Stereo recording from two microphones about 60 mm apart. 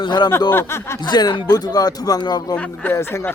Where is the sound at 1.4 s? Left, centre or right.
Left.